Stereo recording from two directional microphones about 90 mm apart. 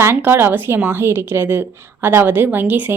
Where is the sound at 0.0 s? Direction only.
25° right (ahead or behind).